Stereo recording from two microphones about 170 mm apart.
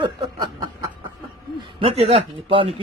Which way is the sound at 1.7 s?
35° right (ahead or behind).